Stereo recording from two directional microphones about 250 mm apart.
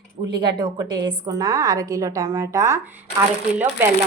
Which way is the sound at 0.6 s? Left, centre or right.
Centre.